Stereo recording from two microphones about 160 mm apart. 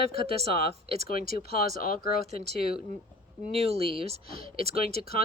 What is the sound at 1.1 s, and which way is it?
Speech, 65° left (ahead or behind).